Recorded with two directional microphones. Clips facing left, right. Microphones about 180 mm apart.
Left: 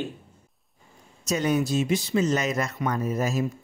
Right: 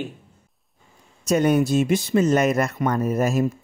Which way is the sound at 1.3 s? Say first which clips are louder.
Right 6 dB; 55° right (ahead or behind).